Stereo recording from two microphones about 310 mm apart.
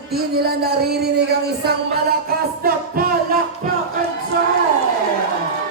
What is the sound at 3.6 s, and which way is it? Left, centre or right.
Speech, right.